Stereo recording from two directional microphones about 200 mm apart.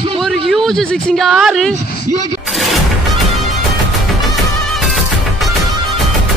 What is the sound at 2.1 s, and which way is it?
Speech, 15° right (ahead or behind).